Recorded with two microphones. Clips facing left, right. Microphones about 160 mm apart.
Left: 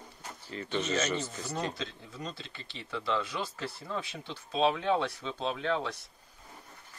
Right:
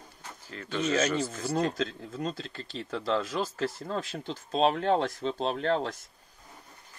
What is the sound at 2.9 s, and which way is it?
Speech, 40° right (ahead or behind).